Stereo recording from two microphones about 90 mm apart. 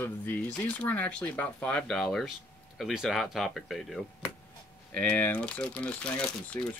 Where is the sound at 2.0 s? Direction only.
Centre (ahead or behind).